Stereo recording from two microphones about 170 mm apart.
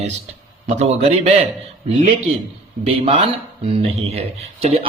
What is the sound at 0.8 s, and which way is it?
Speech, 40° right (ahead or behind).